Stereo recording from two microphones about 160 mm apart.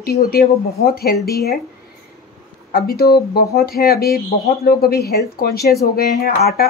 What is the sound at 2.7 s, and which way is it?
A woman's voice, 75° left (ahead or behind).